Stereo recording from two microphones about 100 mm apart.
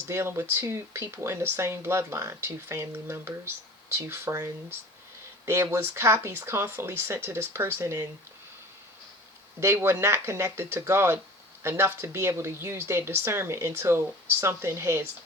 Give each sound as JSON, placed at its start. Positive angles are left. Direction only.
{"t": 0.1, "sound": "speech", "side_deg": -25}
{"t": 5.5, "sound": "speech", "side_deg": -25}
{"t": 9.6, "sound": "speech", "side_deg": -25}